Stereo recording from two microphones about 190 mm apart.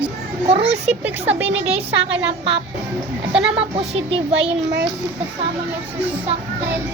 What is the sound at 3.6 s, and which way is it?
Speech, 30° right (ahead or behind).